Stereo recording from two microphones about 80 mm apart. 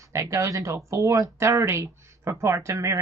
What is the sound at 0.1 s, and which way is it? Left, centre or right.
A woman's voice, right.